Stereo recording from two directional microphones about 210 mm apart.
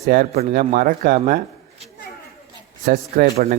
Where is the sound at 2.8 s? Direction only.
45° right (ahead or behind).